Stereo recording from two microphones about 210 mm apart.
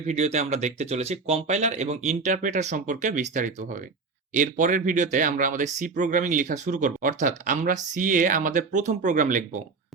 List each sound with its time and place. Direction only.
0.1 s speech: 30° right (ahead or behind)